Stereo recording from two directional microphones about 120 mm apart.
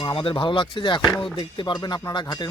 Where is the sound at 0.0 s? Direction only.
45° left (ahead or behind).